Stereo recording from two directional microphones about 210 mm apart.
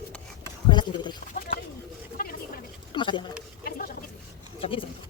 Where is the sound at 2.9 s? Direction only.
20° left (ahead or behind).